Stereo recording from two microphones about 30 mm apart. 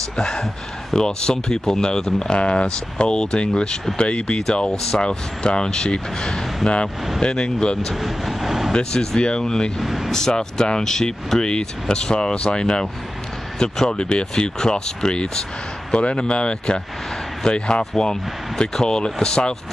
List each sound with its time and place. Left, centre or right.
0.2 s speech: left
2.2 s speech: left
7.9 s speech: centre
9.2 s speech: left
9.8 s speech: centre
10.1 s speech: left
11.4 s speech: left
15.9 s speech: left
17.9 s speech: left